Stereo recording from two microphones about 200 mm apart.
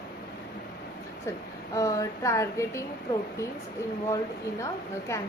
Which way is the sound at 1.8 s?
15° left (ahead or behind).